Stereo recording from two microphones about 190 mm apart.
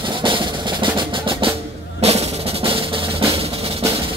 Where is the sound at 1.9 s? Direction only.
35° right (ahead or behind).